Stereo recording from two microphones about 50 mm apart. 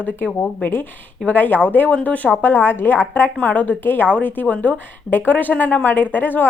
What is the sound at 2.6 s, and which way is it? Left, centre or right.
A woman's voice, left.